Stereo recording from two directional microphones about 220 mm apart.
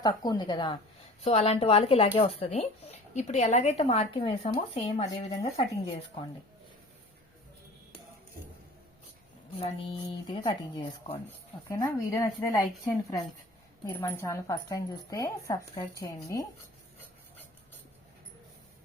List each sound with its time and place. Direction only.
0.0 s speech: 20° left (ahead or behind)
9.6 s speech: 25° left (ahead or behind)
11.7 s speech: 15° left (ahead or behind)